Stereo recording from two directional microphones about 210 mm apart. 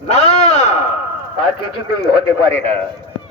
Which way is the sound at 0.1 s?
30° left (ahead or behind).